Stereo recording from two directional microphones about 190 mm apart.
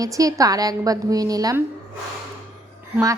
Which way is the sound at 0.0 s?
20° right (ahead or behind).